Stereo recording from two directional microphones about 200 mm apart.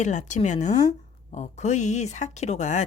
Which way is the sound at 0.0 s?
35° left (ahead or behind).